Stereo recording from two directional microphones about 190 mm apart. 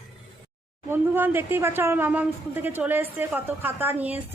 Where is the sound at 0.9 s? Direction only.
10° right (ahead or behind).